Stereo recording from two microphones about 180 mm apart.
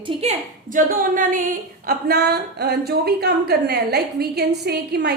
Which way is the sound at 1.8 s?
60° right (ahead or behind).